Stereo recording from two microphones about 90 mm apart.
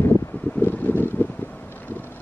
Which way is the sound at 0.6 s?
20° left (ahead or behind).